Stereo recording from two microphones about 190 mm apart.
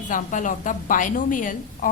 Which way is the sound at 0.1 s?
40° left (ahead or behind).